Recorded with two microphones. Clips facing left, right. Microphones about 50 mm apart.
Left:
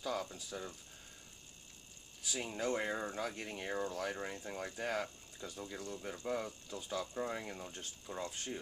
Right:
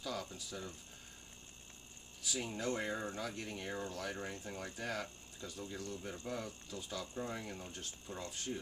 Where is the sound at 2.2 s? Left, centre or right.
Centre.